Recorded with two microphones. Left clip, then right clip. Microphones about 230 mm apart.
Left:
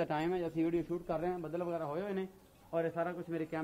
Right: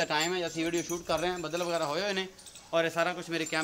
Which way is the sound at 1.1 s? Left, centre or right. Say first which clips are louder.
Right 7 dB; right.